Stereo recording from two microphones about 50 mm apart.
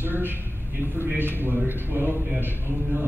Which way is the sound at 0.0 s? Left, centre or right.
Right.